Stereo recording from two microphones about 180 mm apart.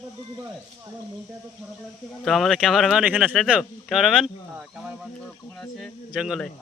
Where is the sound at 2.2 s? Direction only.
Centre (ahead or behind).